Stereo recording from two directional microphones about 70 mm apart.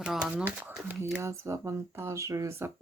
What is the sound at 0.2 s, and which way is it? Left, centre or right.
Speech, centre.